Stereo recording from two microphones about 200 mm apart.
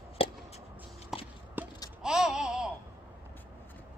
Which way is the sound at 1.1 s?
5° right (ahead or behind).